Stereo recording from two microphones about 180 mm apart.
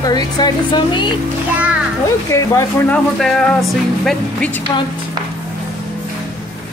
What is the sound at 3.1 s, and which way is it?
Speech, centre (ahead or behind).